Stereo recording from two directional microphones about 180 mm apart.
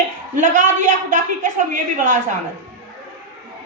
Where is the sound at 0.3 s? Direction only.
45° right (ahead or behind).